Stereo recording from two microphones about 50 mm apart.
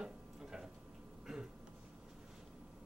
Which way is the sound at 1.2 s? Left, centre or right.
Centre.